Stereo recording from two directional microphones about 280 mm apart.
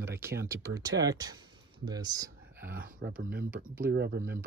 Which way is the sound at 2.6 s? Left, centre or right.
Right.